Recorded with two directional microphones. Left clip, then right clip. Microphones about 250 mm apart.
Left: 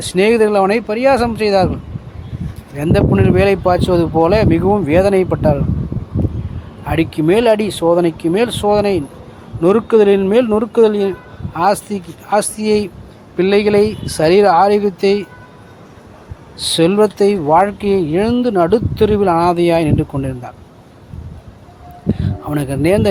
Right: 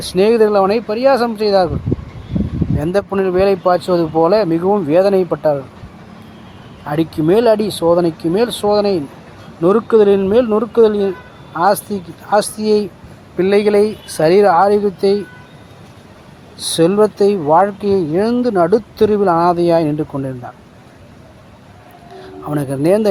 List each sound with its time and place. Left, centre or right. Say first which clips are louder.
0.0 s speech: even; centre
2.8 s speech: left 2 dB; centre
6.8 s speech: left 1 dB; centre
16.6 s speech: even; centre
22.4 s speech: right 1 dB; centre